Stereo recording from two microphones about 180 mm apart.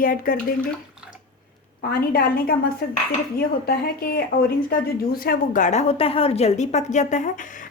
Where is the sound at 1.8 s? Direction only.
60° left (ahead or behind).